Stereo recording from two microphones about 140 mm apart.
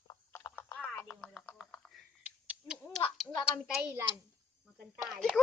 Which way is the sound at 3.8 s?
15° right (ahead or behind).